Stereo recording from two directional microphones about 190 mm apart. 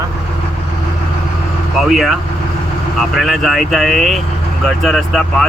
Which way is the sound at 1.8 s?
Centre (ahead or behind).